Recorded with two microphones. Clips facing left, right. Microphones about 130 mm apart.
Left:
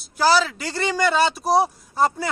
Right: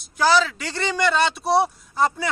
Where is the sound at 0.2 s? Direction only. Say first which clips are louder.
Even; 5° left (ahead or behind).